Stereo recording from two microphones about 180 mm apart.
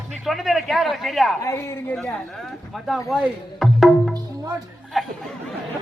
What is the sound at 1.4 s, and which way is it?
Speech, 15° left (ahead or behind).